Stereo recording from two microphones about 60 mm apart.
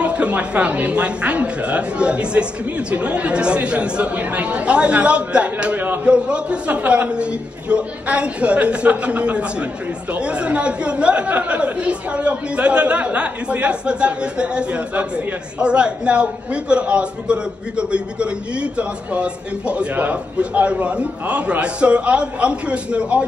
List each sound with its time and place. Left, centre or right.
0.0 s a man's voice: right